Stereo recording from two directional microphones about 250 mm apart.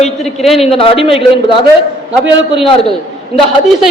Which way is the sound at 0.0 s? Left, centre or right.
Centre.